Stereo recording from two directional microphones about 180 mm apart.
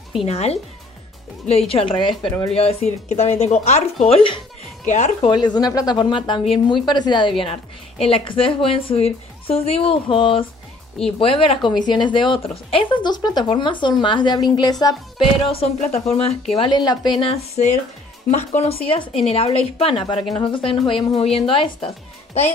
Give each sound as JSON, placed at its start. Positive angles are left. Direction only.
{"t": 0.2, "sound": "a woman's voice", "side_deg": 35}
{"t": 1.7, "sound": "a woman's voice", "side_deg": 30}
{"t": 5.3, "sound": "a woman's voice", "side_deg": 25}
{"t": 17.2, "sound": "a woman's voice", "side_deg": 35}